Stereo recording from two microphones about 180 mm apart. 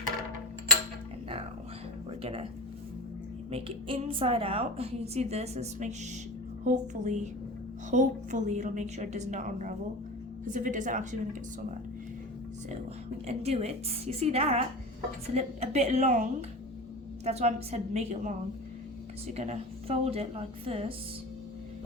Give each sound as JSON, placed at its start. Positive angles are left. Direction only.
{"t": 2.0, "sound": "a sound", "side_deg": -35}
{"t": 3.5, "sound": "a woman's voice", "side_deg": -30}
{"t": 13.2, "sound": "a woman's voice", "side_deg": -35}